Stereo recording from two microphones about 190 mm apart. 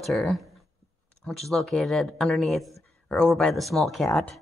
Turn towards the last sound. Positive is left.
turn(degrees=5)  # may be behind; listen again after turning